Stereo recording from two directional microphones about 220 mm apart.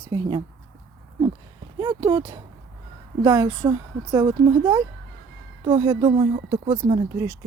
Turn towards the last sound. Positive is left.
turn(degrees=-20)  # may be behind; listen again after turning